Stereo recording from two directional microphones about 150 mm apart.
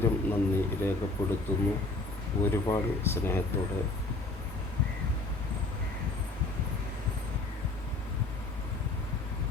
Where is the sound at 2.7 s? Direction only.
15° left (ahead or behind).